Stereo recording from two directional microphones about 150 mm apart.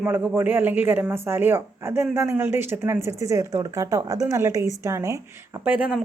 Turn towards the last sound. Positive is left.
turn(degrees=-10)  # may be behind; listen again after turning